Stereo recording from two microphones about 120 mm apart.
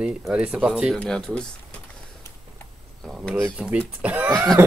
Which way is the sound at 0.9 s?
5° left (ahead or behind).